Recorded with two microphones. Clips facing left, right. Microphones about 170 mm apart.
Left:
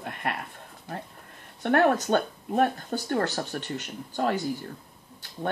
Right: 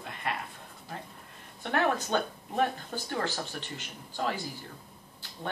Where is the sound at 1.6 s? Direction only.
55° left (ahead or behind).